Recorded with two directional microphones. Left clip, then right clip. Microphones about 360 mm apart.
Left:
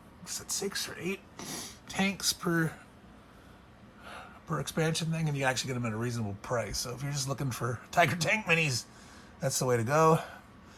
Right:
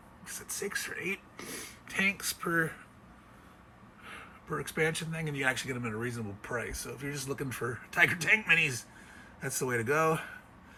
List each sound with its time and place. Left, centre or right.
0.3 s speech: centre
4.0 s speech: centre